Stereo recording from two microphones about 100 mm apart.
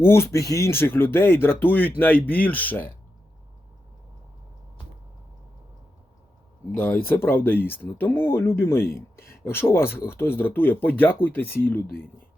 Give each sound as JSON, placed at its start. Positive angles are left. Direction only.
{"t": 0.0, "sound": "speech", "side_deg": 25}
{"t": 6.7, "sound": "speech", "side_deg": 15}